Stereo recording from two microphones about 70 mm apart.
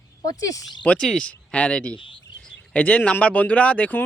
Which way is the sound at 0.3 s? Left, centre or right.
Left.